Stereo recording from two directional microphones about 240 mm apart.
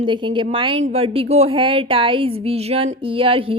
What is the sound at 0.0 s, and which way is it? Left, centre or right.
A woman's voice, right.